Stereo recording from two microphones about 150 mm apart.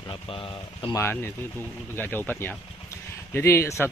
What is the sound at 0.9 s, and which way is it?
Speech, 15° left (ahead or behind).